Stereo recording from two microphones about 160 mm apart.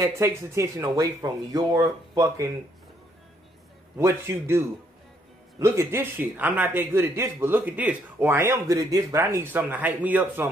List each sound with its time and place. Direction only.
0.0 s speech: 20° right (ahead or behind)
4.0 s a man's voice: 15° right (ahead or behind)